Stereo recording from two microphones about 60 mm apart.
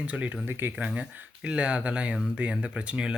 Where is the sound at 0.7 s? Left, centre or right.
Right.